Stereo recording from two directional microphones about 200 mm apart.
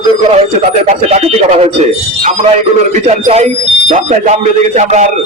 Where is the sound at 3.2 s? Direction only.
35° right (ahead or behind).